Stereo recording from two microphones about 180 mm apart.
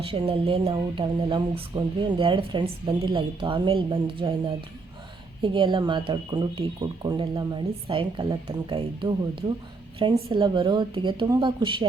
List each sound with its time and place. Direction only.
0.0 s speech: 30° right (ahead or behind)